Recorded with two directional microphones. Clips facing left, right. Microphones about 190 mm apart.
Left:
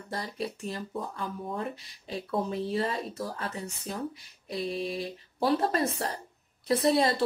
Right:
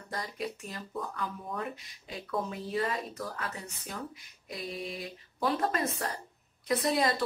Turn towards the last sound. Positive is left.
turn(degrees=30)  # may be behind; listen again after turning